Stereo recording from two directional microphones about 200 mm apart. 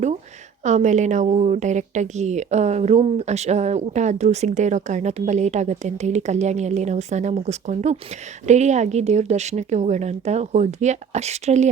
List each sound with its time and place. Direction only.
0.6 s a woman's voice: 35° right (ahead or behind)